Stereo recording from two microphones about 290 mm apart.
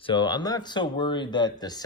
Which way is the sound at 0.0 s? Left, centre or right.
Centre.